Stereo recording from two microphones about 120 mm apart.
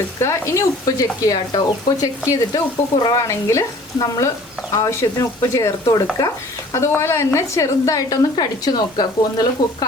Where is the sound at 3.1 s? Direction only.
25° left (ahead or behind).